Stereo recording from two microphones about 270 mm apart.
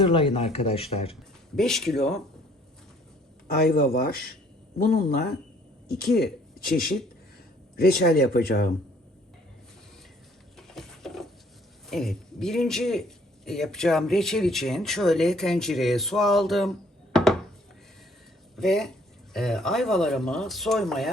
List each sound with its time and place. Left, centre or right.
0.0 s speech: centre
1.5 s a man's voice: centre
3.4 s a man's voice: left
10.6 s a sound: centre
11.9 s a man's voice: centre
18.5 s a man's voice: centre